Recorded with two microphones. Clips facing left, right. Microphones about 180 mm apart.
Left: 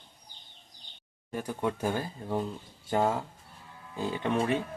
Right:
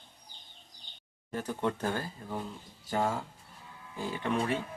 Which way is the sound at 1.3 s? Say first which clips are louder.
Left 1 dB; 15° left (ahead or behind).